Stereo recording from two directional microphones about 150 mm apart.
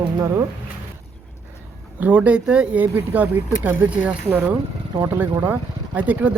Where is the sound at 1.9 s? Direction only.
10° right (ahead or behind).